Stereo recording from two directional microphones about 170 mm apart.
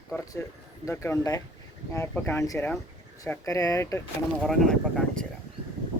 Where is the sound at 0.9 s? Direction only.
15° left (ahead or behind).